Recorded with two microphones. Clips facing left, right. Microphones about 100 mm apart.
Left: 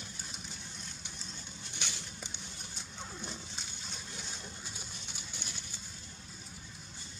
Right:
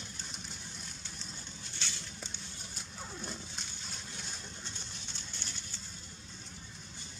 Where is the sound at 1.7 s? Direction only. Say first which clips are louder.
Left 1 dB; 15° left (ahead or behind).